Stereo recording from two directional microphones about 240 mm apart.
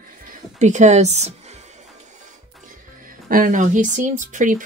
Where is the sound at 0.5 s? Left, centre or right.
Right.